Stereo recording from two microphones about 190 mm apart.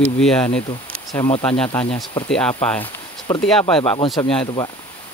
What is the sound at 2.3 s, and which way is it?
Speech, 5° left (ahead or behind).